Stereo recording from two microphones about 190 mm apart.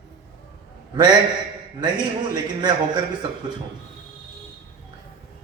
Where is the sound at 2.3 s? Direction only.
25° right (ahead or behind).